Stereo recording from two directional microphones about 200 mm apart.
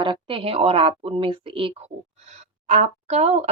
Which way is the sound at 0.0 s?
25° right (ahead or behind).